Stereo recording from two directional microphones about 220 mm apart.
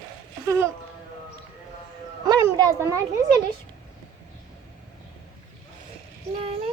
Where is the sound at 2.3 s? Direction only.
15° right (ahead or behind).